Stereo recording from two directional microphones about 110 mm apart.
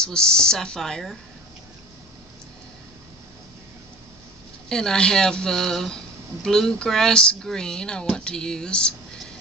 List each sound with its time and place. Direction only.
0.0 s speech: 5° left (ahead or behind)
4.6 s speech: 5° left (ahead or behind)